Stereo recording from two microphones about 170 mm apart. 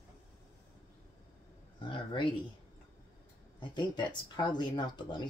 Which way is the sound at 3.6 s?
25° left (ahead or behind).